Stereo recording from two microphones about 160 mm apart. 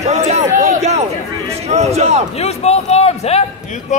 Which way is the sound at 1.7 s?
45° right (ahead or behind).